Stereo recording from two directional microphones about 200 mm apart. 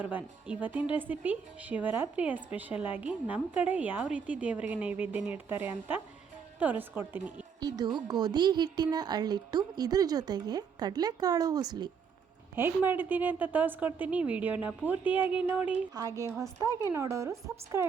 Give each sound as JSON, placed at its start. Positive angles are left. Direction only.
{"t": 0.0, "sound": "a woman's voice", "side_deg": -10}
{"t": 7.6, "sound": "speech", "side_deg": -20}
{"t": 12.5, "sound": "a woman's voice", "side_deg": -10}